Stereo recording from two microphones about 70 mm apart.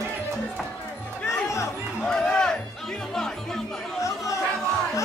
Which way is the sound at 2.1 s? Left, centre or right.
Centre.